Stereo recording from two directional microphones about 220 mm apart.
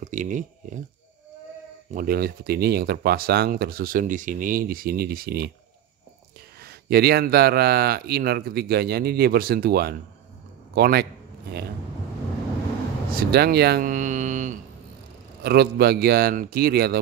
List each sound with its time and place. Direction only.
0.0 s speech: 35° right (ahead or behind)
2.0 s speech: 45° right (ahead or behind)
6.6 s a man's voice: 45° right (ahead or behind)
13.1 s speech: 45° right (ahead or behind)
15.4 s speech: 45° right (ahead or behind)